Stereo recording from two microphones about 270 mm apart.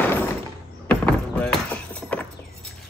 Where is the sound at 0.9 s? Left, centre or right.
Centre.